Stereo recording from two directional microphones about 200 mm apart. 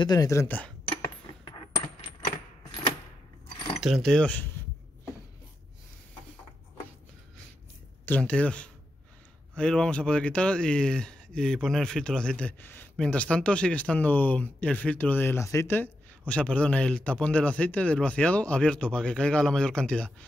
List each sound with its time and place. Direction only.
0.0 s speech: 20° left (ahead or behind)
3.5 s keys jangling: 25° left (ahead or behind)
3.8 s speech: centre (ahead or behind)
8.0 s speech: 5° left (ahead or behind)